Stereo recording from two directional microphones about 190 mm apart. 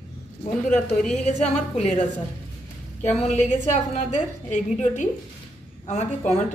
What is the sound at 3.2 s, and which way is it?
A woman's voice, 35° left (ahead or behind).